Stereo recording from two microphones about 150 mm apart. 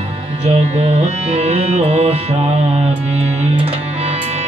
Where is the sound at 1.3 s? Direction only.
45° right (ahead or behind).